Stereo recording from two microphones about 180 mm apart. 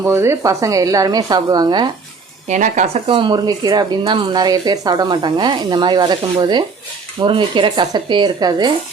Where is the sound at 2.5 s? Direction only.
45° right (ahead or behind); by 8.7 s 25° right (ahead or behind).